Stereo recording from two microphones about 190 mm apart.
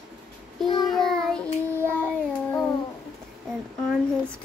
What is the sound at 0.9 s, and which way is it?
Speech, 5° left (ahead or behind).